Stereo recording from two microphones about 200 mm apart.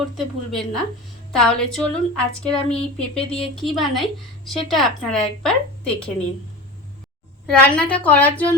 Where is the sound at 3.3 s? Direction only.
Centre (ahead or behind).